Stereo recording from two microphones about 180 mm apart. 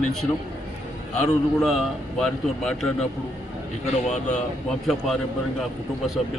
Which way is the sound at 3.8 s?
40° left (ahead or behind).